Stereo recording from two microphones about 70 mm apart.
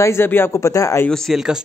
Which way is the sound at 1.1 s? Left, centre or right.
Centre.